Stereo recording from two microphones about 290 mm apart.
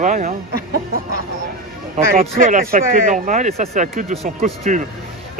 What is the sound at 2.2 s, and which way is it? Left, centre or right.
Speech, right.